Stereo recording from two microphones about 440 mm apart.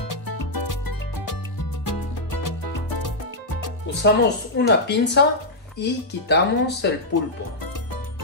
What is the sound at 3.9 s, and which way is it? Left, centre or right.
Music, left.